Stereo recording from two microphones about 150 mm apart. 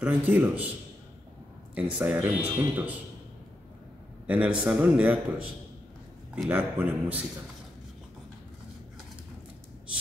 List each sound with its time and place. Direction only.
0.0 s speech: 10° right (ahead or behind)
1.8 s speech: 10° right (ahead or behind)
4.3 s speech: 10° right (ahead or behind)
6.3 s speech: 10° right (ahead or behind)